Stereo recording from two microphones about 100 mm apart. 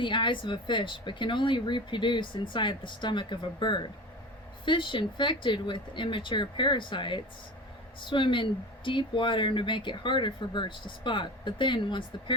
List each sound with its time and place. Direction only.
0.0 s speech: 55° left (ahead or behind)